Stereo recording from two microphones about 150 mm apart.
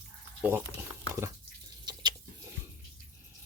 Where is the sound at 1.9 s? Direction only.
30° right (ahead or behind).